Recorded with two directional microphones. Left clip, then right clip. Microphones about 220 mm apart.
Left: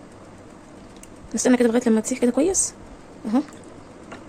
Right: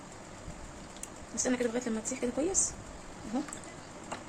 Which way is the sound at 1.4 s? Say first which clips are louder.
Left 13 dB; 45° left (ahead or behind).